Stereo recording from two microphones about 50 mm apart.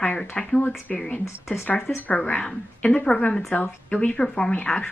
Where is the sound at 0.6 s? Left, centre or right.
Left.